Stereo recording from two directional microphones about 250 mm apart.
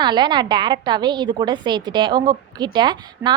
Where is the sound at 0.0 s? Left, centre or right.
Centre.